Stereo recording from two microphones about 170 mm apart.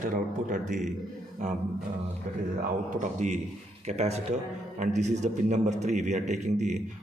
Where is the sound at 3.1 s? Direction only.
45° right (ahead or behind).